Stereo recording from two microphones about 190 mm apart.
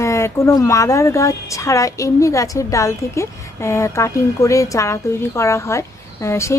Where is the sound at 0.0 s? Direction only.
15° left (ahead or behind).